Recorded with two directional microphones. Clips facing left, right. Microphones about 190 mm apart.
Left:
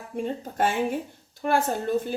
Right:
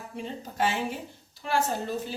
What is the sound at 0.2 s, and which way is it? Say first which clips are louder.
Speech: left 4 dB; 50° left (ahead or behind).